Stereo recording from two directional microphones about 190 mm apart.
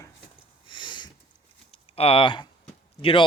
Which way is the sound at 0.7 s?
25° left (ahead or behind).